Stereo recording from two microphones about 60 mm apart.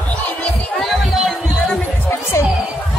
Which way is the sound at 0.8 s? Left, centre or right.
Centre.